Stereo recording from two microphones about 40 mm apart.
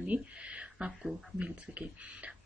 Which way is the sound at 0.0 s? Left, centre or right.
Right.